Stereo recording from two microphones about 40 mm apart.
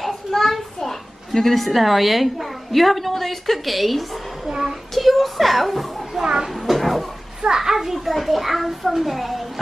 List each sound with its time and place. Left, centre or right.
0.3 s a child's voice: centre
4.5 s child singing: centre
4.9 s children playing: centre
6.2 s child singing: centre
6.5 s a sound: centre
7.4 s a child's voice: centre